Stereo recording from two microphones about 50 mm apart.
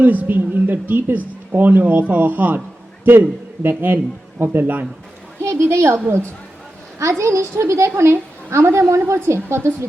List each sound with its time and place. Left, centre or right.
0.0 s speech: right
3.1 s speech: right
5.4 s a woman's voice: right
7.0 s a woman's voice: right